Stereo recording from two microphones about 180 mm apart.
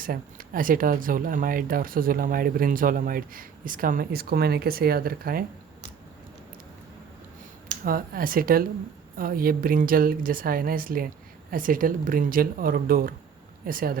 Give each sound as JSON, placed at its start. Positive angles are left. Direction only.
{"t": 0.0, "sound": "speech", "side_deg": -50}
{"t": 7.9, "sound": "speech", "side_deg": -55}